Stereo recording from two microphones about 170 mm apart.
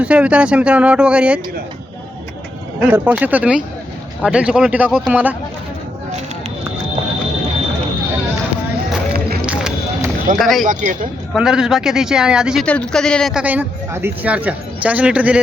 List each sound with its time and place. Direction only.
0.0 s speech: 10° right (ahead or behind)
2.8 s a man's voice: 10° right (ahead or behind)
9.1 s music: 65° right (ahead or behind)
9.5 s run: 5° right (ahead or behind)
10.3 s a man's voice: centre (ahead or behind)
10.7 s a man's voice: 50° right (ahead or behind)
11.3 s a man's voice: 5° right (ahead or behind)
12.6 s speech: 5° left (ahead or behind)